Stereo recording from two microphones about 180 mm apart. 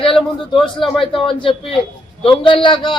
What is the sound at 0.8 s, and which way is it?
A man's voice, 30° left (ahead or behind).